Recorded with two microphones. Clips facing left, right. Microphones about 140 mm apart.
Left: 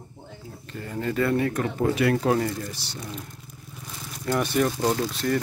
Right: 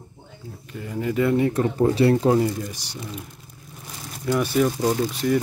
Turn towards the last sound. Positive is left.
turn(degrees=-15)  # may be behind; listen again after turning